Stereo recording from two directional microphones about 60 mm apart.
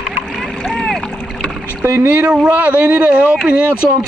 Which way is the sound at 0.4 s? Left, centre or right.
Centre.